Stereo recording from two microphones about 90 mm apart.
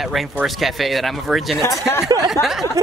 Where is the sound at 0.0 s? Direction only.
Centre (ahead or behind).